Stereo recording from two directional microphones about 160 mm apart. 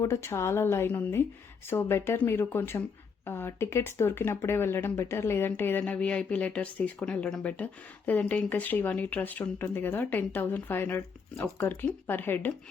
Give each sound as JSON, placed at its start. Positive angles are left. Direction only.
{"t": 0.0, "sound": "speech", "side_deg": 20}